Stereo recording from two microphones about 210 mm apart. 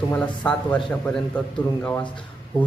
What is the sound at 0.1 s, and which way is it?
A man's voice, 5° left (ahead or behind).